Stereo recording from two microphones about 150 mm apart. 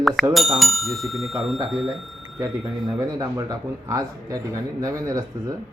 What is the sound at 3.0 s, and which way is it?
A man's voice, 25° right (ahead or behind).